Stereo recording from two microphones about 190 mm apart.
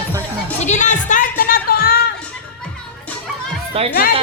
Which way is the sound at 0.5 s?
40° left (ahead or behind).